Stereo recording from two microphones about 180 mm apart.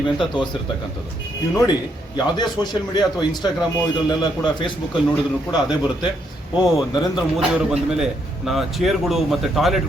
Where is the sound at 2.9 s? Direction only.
25° left (ahead or behind).